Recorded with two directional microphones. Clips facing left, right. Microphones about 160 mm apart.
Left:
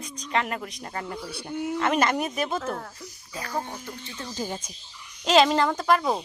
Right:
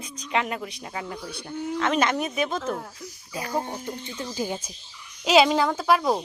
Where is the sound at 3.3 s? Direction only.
25° right (ahead or behind).